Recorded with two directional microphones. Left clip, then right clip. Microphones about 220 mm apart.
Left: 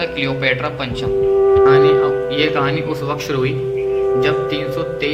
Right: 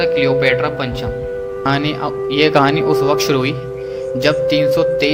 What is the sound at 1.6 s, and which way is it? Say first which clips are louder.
Speech: left 7 dB; 45° right (ahead or behind).